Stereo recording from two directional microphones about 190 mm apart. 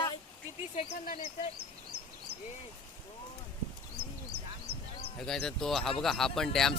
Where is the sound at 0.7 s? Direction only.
40° left (ahead or behind).